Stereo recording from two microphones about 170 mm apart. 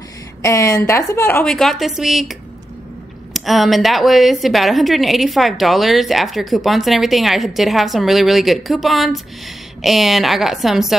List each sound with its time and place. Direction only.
0.4 s a woman's voice: 20° left (ahead or behind); by 2.3 s centre (ahead or behind)
3.3 s a woman's voice: centre (ahead or behind)